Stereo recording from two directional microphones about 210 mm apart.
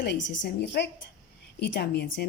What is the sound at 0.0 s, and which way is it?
A woman's voice, 55° left (ahead or behind).